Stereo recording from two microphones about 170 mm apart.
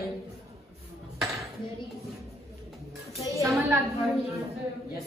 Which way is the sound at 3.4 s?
20° right (ahead or behind).